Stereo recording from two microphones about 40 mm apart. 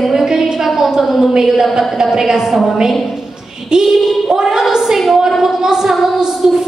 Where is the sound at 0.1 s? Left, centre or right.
Centre.